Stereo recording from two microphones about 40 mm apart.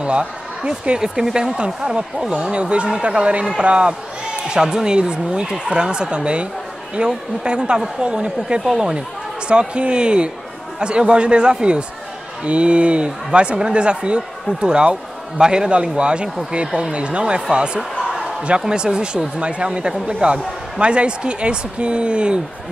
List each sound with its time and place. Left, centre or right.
0.0 s speech: right